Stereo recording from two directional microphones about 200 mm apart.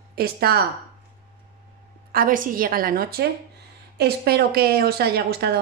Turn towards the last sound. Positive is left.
turn(degrees=-55)  # may be behind; listen again after turning